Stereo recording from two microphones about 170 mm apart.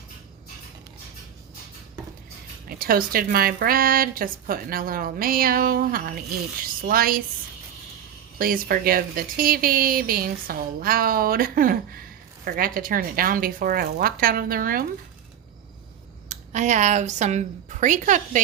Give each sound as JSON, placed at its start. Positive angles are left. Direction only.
{"t": 2.6, "sound": "a woman's voice", "side_deg": -60}
{"t": 8.4, "sound": "a woman's voice", "side_deg": -55}
{"t": 16.3, "sound": "a woman's voice", "side_deg": -45}